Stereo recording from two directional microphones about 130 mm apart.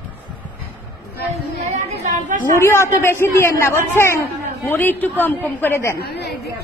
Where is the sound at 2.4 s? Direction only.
20° left (ahead or behind).